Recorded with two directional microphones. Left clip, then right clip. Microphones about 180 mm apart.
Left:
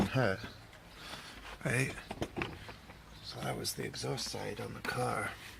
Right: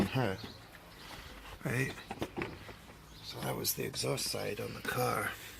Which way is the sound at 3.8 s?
15° right (ahead or behind).